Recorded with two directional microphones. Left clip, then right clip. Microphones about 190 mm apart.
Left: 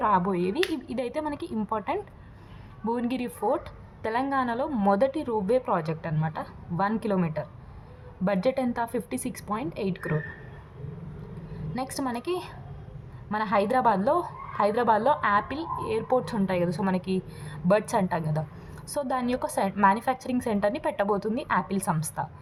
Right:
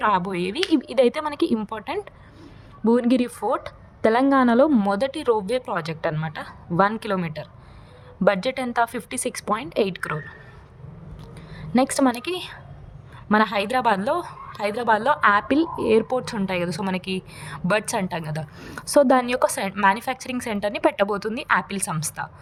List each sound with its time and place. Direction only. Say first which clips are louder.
0.0 s a woman's voice: right 3 dB; 50° right (ahead or behind)
11.5 s a woman's voice: right 12 dB; 45° right (ahead or behind)